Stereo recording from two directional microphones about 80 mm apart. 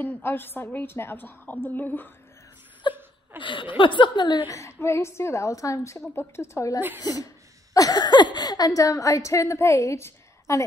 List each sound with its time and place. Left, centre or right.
0.0 s a woman's voice: left
2.8 s a sound: left
3.3 s speech: left
4.5 s a woman's voice: left
5.9 s a woman's voice: left
7.0 s speech: left